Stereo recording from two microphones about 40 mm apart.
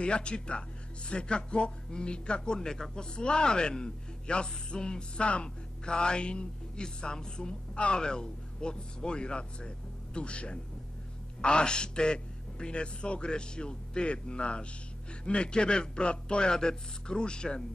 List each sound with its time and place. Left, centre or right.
0.0 s speech: left